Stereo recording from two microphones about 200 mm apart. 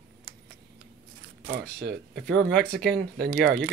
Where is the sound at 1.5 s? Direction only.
55° right (ahead or behind).